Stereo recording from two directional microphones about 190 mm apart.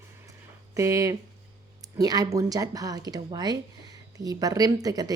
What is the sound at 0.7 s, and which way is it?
Speech, 15° right (ahead or behind).